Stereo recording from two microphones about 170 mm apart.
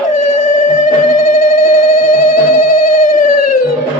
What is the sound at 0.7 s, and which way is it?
Music, 55° left (ahead or behind).